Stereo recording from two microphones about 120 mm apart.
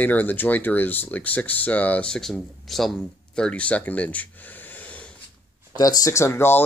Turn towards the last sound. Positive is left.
turn(degrees=20)  # may be behind; listen again after turning